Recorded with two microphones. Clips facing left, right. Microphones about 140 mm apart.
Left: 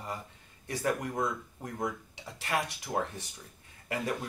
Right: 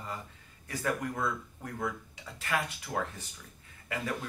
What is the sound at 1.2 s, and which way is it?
Speech, 15° left (ahead or behind).